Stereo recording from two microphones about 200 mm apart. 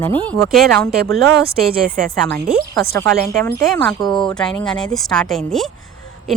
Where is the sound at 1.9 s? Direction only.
45° right (ahead or behind).